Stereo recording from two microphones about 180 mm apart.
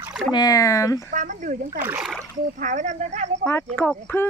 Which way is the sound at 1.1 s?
50° right (ahead or behind).